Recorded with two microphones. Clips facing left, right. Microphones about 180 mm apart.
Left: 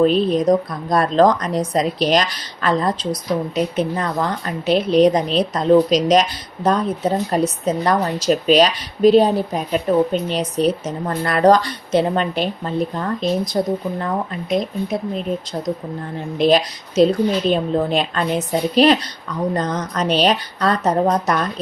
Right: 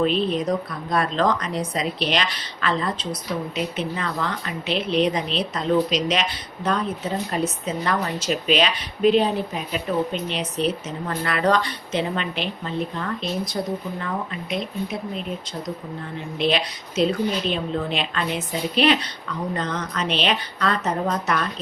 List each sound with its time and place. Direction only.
0.0 s a woman's voice: 40° left (ahead or behind)
16.4 s a woman's voice: 40° left (ahead or behind)